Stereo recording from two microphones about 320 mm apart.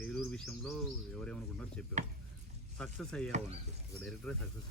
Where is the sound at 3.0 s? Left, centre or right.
Centre.